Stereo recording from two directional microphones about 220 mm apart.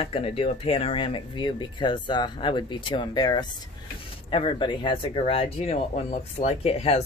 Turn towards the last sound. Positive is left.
turn(degrees=30)  # may be behind; listen again after turning